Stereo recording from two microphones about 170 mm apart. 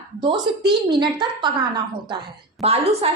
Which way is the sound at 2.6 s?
40° right (ahead or behind).